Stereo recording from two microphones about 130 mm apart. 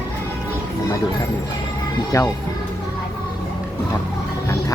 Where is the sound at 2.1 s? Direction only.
25° left (ahead or behind).